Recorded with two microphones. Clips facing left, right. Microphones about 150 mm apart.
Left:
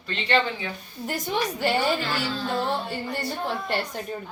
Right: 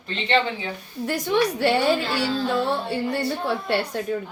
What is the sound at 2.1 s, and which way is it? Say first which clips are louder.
Speech: right 4 dB; 35° right (ahead or behind).